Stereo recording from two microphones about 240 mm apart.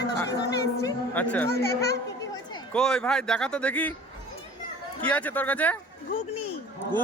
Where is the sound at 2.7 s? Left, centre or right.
Centre.